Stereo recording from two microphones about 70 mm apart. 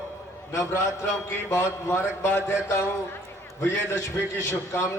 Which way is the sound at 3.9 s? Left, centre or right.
Left.